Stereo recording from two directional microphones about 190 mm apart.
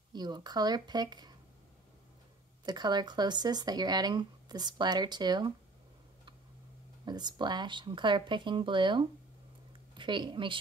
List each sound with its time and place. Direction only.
0.1 s speech: 20° right (ahead or behind)
2.6 s speech: 20° right (ahead or behind)
7.1 s a woman's voice: 20° right (ahead or behind)